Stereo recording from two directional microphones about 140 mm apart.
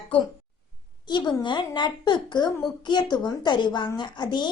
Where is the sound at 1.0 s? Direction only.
30° left (ahead or behind).